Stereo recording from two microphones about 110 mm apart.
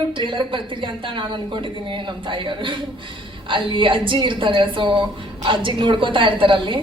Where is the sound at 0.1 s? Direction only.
50° right (ahead or behind).